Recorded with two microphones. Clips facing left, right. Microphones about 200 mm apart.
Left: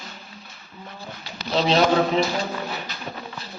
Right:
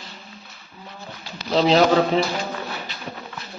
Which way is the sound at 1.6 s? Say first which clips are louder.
Right 3 dB; 35° right (ahead or behind).